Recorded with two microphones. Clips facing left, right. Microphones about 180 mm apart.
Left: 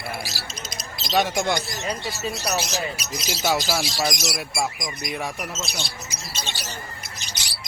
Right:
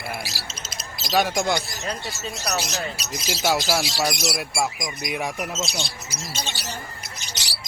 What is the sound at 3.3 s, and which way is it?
Speech, 5° right (ahead or behind).